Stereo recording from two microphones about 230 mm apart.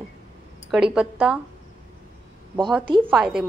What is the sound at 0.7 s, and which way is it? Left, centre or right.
Speech, centre.